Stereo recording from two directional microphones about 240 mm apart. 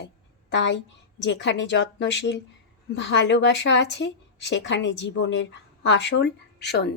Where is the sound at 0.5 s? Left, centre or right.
Left.